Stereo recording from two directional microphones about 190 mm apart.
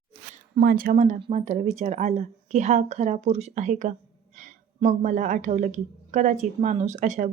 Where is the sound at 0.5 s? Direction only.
50° right (ahead or behind).